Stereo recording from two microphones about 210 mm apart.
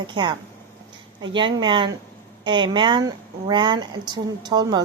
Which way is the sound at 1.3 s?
20° right (ahead or behind).